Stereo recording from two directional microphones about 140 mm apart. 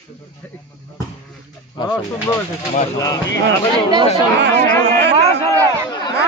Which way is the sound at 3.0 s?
25° left (ahead or behind).